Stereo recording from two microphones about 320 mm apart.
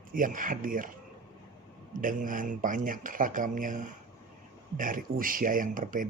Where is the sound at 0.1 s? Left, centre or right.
Right.